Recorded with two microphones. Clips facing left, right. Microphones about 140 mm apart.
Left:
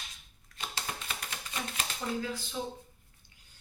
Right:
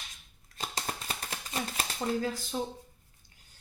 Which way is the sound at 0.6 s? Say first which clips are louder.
Right 3 dB; 40° right (ahead or behind).